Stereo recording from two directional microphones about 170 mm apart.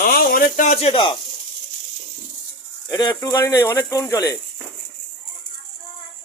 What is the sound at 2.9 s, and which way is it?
Speech, 25° left (ahead or behind).